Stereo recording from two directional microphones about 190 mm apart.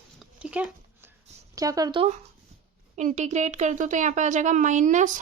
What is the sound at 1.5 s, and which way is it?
Speech, 20° right (ahead or behind).